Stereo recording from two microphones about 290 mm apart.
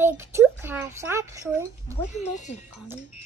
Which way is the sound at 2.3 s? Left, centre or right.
Left.